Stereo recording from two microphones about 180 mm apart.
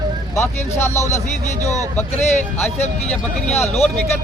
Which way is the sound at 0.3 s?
15° left (ahead or behind).